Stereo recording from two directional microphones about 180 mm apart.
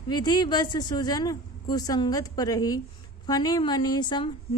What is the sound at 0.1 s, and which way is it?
A woman's voice, 25° left (ahead or behind).